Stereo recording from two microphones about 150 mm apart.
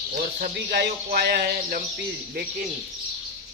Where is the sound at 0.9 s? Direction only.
90° right.